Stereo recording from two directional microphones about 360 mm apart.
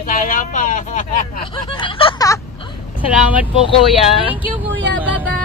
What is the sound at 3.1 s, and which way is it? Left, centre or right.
Speech, centre.